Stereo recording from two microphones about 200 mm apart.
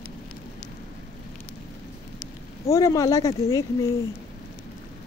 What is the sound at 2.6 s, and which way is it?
Speech, 15° left (ahead or behind).